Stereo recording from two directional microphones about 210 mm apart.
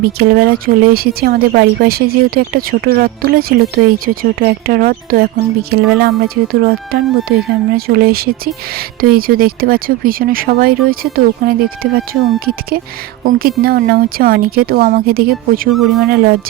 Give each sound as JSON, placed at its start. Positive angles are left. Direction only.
{"t": 0.0, "sound": "speech", "side_deg": -45}
{"t": 13.2, "sound": "speech", "side_deg": -45}